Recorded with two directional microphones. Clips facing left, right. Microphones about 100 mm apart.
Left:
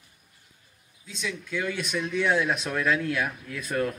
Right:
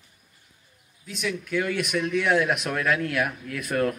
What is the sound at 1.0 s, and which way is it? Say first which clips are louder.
Speech: right 4 dB; 20° left (ahead or behind).